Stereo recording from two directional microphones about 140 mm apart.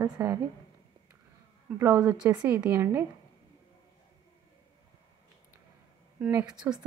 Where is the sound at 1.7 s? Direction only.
10° right (ahead or behind).